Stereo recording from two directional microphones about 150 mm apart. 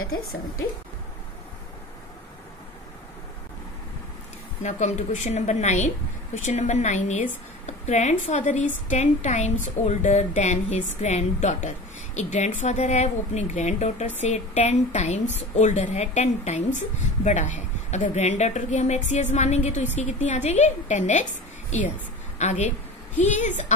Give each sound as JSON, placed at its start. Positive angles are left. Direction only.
{"t": 4.6, "sound": "a woman's voice", "side_deg": 50}
{"t": 22.4, "sound": "a woman's voice", "side_deg": 50}